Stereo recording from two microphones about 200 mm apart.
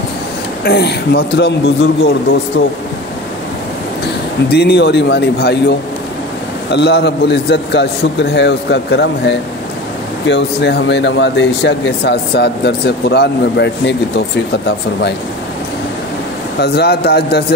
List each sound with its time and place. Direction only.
0.7 s speech: 55° left (ahead or behind)
4.5 s speech: 55° left (ahead or behind)
16.5 s a man's voice: 55° left (ahead or behind)